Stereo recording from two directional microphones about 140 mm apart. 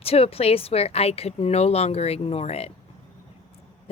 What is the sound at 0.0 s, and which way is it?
Speech, 45° left (ahead or behind).